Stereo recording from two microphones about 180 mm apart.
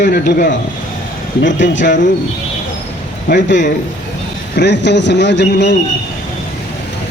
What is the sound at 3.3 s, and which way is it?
Speech, 80° left.